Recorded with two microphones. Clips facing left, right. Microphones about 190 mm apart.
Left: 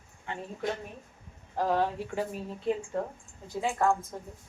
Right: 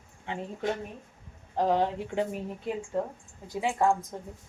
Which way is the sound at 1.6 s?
20° right (ahead or behind).